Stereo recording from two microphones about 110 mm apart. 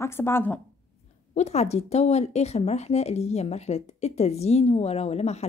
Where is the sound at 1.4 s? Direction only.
80° left.